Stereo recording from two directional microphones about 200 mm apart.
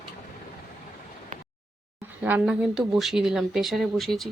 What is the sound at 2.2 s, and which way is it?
Speech, 5° right (ahead or behind).